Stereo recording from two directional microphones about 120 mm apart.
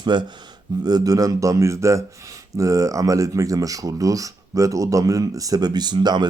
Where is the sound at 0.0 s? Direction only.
40° right (ahead or behind).